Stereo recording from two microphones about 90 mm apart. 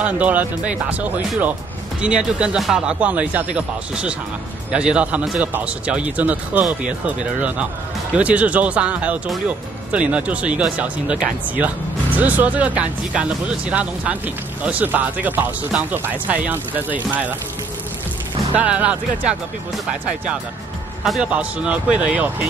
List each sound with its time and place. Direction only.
0.0 s speech: 15° right (ahead or behind)
18.5 s speech: 15° right (ahead or behind)
21.2 s speech: 15° right (ahead or behind)